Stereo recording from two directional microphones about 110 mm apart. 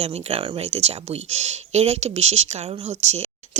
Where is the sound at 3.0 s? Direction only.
75° right (ahead or behind).